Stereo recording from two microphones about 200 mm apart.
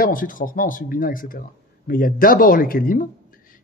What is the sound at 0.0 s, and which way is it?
Speech, 45° left (ahead or behind).